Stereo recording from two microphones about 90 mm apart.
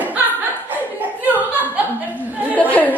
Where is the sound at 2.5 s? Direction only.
15° left (ahead or behind).